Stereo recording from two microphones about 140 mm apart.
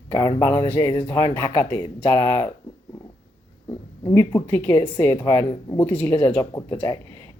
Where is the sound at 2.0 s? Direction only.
15° left (ahead or behind).